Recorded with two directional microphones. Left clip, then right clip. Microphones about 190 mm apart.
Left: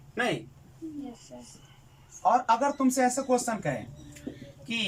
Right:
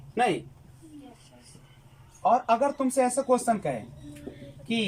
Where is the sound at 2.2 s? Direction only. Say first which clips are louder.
Right 1 dB; 15° right (ahead or behind).